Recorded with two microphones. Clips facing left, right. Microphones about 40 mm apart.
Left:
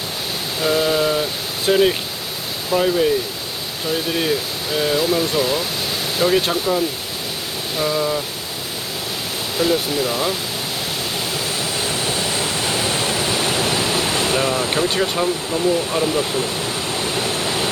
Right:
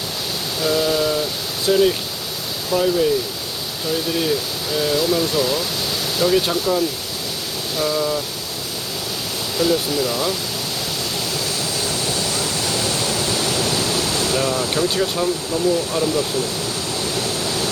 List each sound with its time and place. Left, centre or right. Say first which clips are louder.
0.6 s a sound: left 1 dB; left
1.6 s speech: even; left
4.1 s speech: even; left
9.6 s speech: even; centre
11.6 s pink noise: left 1 dB; left
17.0 s waterfall: left 1 dB; left